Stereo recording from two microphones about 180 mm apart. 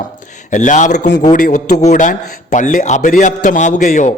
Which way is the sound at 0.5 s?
45° left (ahead or behind).